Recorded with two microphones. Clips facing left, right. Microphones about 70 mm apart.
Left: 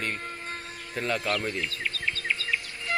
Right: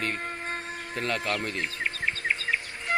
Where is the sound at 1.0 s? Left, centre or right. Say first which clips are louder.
Left 1 dB; centre.